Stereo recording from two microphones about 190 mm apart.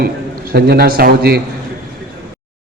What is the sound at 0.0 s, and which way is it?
A man's voice, 55° right (ahead or behind).